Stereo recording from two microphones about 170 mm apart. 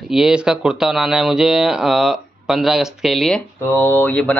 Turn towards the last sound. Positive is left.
turn(degrees=10)  # may be behind; listen again after turning